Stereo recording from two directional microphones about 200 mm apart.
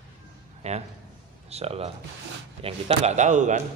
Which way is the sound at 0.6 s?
35° right (ahead or behind).